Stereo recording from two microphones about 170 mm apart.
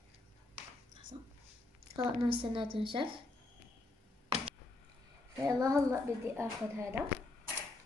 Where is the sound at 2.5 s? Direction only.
30° right (ahead or behind).